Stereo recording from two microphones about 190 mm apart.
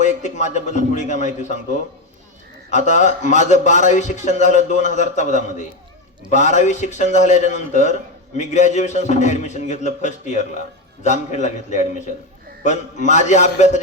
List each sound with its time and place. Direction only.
0.0 s a man's voice: 40° left (ahead or behind)
2.6 s a man's voice: 40° left (ahead or behind)